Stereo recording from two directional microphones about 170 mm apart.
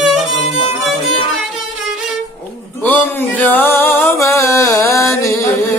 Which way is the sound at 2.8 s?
10° left (ahead or behind).